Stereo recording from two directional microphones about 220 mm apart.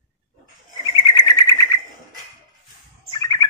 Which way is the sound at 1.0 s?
20° left (ahead or behind).